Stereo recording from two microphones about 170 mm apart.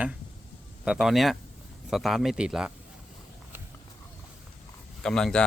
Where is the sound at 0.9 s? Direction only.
Centre (ahead or behind).